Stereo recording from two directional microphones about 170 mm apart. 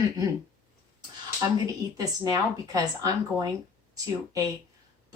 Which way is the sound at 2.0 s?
20° right (ahead or behind).